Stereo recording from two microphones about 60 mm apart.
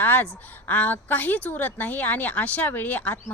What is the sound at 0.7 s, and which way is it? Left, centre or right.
A woman's voice, left.